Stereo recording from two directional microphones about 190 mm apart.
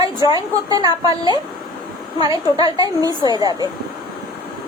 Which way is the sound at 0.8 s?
20° right (ahead or behind).